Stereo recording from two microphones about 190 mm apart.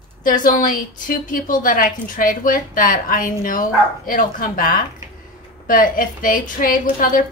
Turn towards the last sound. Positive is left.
turn(degrees=45)  # may be behind; listen again after turning